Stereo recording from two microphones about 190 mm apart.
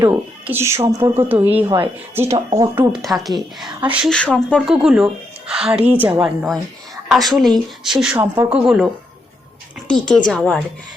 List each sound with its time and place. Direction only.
0.0 s speech: 10° right (ahead or behind)
2.7 s speech: centre (ahead or behind)
4.1 s speech: 5° left (ahead or behind)
9.9 s speech: 5° left (ahead or behind)